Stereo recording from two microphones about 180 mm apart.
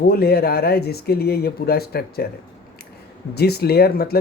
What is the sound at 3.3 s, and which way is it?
Speech, 60° left (ahead or behind).